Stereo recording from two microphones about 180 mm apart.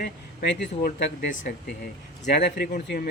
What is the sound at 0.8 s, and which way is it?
Speech, 55° left (ahead or behind).